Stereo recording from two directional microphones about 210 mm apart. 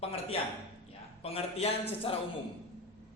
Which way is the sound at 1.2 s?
30° left (ahead or behind).